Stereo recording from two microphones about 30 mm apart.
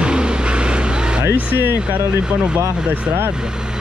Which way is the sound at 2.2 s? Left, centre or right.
Right.